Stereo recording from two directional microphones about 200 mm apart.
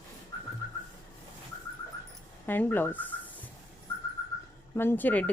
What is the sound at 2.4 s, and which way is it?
Speech, 10° left (ahead or behind).